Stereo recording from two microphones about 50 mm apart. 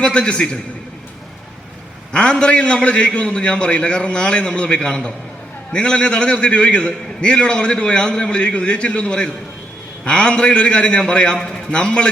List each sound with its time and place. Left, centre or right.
0.0 s a man's voice: left
2.1 s a man's voice: left